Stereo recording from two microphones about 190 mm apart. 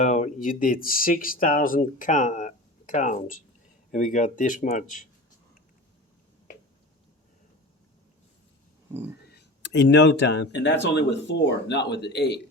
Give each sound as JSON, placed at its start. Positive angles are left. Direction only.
{"t": 0.0, "sound": "speech", "side_deg": 40}
{"t": 9.3, "sound": "speech", "side_deg": 65}